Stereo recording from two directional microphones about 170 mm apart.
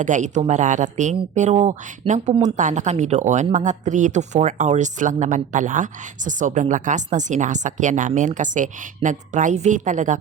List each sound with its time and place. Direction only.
0.0 s speech: 45° right (ahead or behind)